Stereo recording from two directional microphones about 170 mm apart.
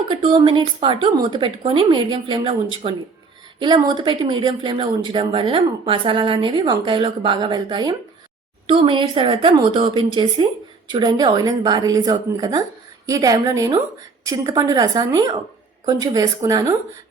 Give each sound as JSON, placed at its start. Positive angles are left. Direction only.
{"t": 0.1, "sound": "a woman's voice", "side_deg": -30}